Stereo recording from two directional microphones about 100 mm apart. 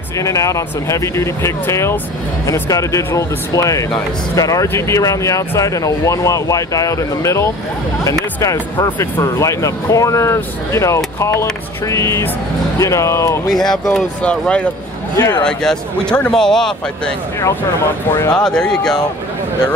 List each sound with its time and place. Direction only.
0.2 s speech: 35° left (ahead or behind)
8.9 s speech: 20° left (ahead or behind)
9.2 s speech: 35° left (ahead or behind)
13.5 s a man's voice: 5° left (ahead or behind)
15.1 s speech: 35° left (ahead or behind)
15.4 s a man's voice: 5° left (ahead or behind)
18.3 s speech: 10° left (ahead or behind)